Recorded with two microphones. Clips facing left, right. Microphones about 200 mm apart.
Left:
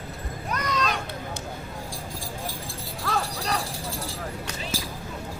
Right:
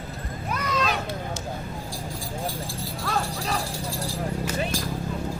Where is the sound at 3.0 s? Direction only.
Centre (ahead or behind).